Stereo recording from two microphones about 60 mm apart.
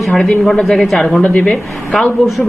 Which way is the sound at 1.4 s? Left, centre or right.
Centre.